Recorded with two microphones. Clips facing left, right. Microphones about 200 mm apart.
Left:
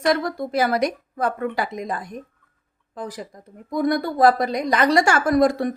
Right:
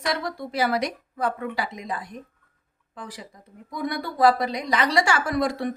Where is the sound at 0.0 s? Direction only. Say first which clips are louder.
Left 7 dB; 50° left (ahead or behind).